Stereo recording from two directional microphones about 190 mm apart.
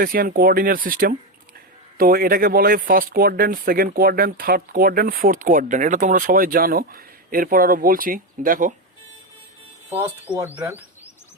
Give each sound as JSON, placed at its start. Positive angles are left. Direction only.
{"t": 0.0, "sound": "speech", "side_deg": -50}
{"t": 10.3, "sound": "speech", "side_deg": -10}